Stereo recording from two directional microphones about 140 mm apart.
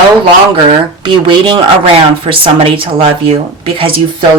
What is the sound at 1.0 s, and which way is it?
Speech, 35° right (ahead or behind).